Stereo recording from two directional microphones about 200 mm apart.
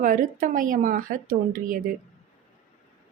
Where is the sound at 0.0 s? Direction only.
40° right (ahead or behind).